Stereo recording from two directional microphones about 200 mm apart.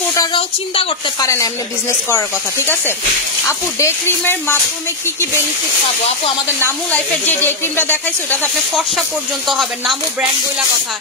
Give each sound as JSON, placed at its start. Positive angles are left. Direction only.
{"t": 0.1, "sound": "speech", "side_deg": 20}
{"t": 1.2, "sound": "speech", "side_deg": 15}
{"t": 6.6, "sound": "speech", "side_deg": 10}
{"t": 9.5, "sound": "speech", "side_deg": 0}